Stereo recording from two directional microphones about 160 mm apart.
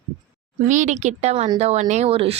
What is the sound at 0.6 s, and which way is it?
Speech, 50° right (ahead or behind).